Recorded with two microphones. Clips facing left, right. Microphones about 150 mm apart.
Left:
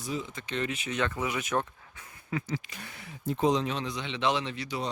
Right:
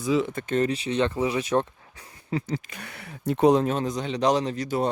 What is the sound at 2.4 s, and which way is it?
Speech, 60° right (ahead or behind).